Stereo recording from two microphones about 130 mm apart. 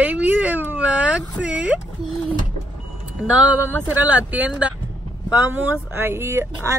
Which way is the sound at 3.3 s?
10° right (ahead or behind).